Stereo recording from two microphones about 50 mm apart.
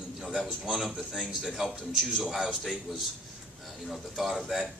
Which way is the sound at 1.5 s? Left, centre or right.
Centre.